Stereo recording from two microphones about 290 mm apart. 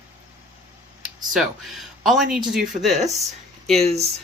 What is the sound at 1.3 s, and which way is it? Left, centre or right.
Speech, centre.